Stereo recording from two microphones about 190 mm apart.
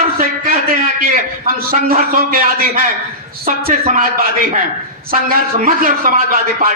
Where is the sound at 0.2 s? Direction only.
50° right (ahead or behind).